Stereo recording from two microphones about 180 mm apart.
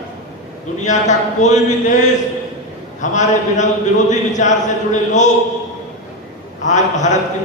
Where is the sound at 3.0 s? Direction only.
40° left (ahead or behind).